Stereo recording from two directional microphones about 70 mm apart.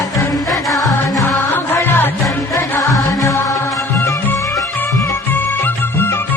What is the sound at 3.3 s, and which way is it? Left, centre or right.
Music, left.